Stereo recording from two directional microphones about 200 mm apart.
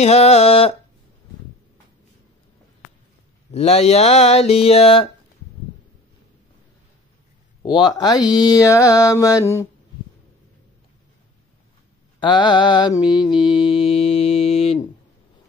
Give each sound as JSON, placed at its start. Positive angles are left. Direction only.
{"t": 0.0, "sound": "a sound", "side_deg": 30}
{"t": 3.5, "sound": "a sound", "side_deg": 30}
{"t": 7.6, "sound": "mantra", "side_deg": 20}
{"t": 8.2, "sound": "speech", "side_deg": -5}
{"t": 8.5, "sound": "mantra", "side_deg": 15}
{"t": 12.2, "sound": "mantra", "side_deg": 20}